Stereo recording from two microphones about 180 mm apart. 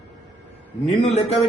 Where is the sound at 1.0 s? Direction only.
35° left (ahead or behind).